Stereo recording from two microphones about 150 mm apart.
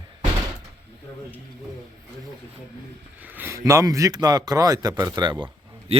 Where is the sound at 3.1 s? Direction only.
10° right (ahead or behind); by 5.4 s 30° right (ahead or behind).